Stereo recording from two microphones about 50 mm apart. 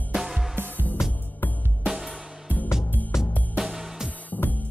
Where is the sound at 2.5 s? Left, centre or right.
Right.